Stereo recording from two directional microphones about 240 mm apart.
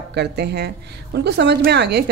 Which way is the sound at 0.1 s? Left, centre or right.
Right.